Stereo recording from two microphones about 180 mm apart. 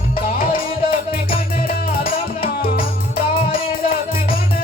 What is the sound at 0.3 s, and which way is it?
Music, 55° left (ahead or behind).